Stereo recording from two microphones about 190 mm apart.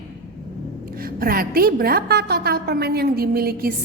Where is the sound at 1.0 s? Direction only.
50° right (ahead or behind).